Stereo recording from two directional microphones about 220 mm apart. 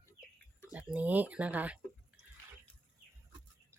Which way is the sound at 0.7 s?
5° right (ahead or behind).